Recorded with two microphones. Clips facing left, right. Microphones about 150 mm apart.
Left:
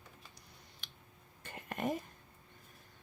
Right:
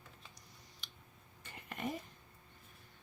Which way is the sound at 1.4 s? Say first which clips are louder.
Left 4 dB; 50° left (ahead or behind).